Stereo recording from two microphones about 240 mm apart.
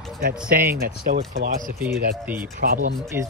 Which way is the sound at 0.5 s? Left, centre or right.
Right.